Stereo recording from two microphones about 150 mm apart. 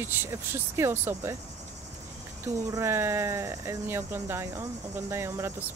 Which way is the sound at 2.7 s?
15° right (ahead or behind).